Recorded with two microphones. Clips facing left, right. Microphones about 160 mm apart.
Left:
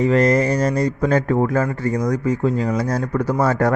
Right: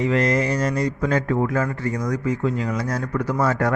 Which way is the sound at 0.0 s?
40° left (ahead or behind).